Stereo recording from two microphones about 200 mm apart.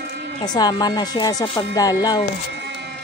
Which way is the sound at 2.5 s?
60° right (ahead or behind).